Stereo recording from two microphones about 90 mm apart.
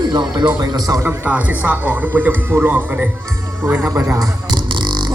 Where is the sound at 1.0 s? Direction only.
20° right (ahead or behind).